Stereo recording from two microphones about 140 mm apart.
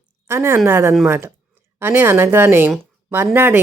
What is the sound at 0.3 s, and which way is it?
A woman's voice, 15° right (ahead or behind).